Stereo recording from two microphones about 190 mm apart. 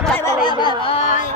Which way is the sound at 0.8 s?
30° left (ahead or behind).